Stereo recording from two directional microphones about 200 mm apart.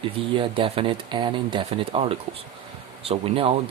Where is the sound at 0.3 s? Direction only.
25° right (ahead or behind).